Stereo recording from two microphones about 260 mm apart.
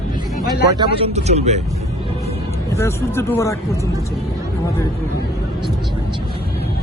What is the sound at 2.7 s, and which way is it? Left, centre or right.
Speech, centre.